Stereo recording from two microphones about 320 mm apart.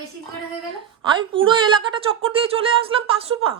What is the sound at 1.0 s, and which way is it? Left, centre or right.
Speech, centre.